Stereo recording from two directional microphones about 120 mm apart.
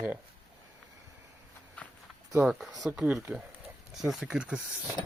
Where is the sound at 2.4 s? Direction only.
5° right (ahead or behind).